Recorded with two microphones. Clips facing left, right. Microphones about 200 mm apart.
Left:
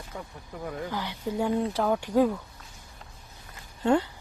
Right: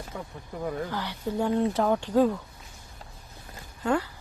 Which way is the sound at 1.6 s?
Centre (ahead or behind).